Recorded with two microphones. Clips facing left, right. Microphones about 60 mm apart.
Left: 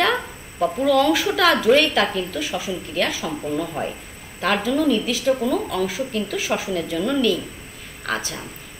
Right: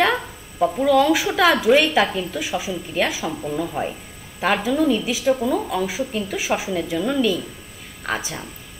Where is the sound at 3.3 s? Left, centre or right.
Centre.